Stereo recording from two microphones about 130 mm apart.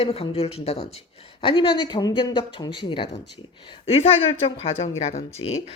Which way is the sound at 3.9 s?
50° left (ahead or behind).